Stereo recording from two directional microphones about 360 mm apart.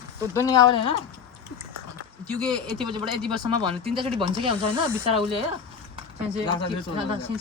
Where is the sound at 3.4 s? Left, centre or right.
Centre.